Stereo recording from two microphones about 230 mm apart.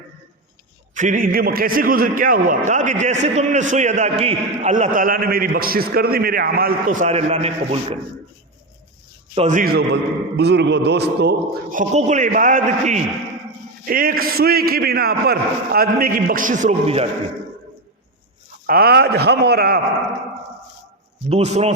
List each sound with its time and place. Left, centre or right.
0.9 s a man's voice: right
9.3 s a man's voice: right
18.6 s a man's voice: right
21.2 s a man's voice: right